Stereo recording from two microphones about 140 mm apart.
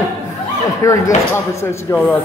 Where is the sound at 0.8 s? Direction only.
20° left (ahead or behind).